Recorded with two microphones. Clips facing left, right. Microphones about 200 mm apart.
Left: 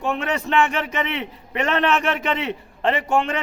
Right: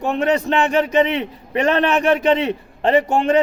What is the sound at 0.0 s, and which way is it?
A man's voice, 40° right (ahead or behind).